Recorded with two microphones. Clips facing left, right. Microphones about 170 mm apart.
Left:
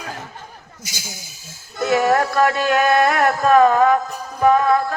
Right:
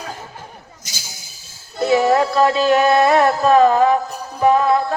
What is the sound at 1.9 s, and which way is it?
Music, 50° left (ahead or behind).